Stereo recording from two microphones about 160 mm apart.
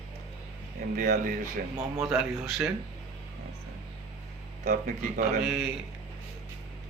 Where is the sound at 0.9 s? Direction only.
55° right (ahead or behind).